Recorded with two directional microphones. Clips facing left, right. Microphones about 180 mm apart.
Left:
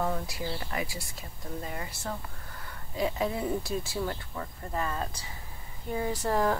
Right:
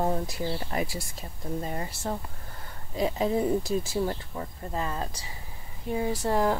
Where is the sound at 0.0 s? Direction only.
30° right (ahead or behind).